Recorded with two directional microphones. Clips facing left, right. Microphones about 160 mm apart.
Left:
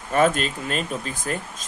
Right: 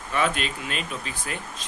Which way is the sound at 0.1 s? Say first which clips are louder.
Left 6 dB; 45° left (ahead or behind).